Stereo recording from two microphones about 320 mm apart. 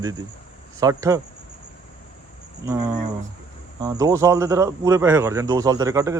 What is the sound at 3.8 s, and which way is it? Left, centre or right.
Speech, centre.